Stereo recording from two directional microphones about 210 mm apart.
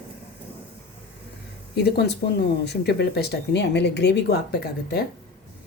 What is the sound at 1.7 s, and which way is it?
Speech, 50° left (ahead or behind).